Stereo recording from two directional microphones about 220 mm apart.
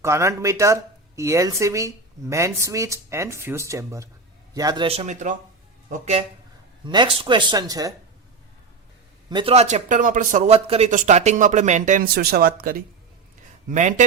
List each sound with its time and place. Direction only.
0.0 s speech: 15° right (ahead or behind)
9.3 s speech: 25° right (ahead or behind)